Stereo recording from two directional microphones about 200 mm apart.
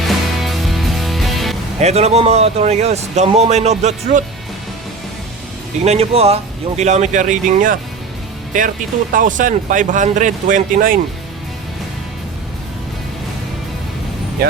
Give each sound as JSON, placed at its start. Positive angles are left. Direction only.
{"t": 0.1, "sound": "music", "side_deg": 0}
{"t": 1.8, "sound": "speech", "side_deg": -35}
{"t": 5.8, "sound": "speech", "side_deg": -30}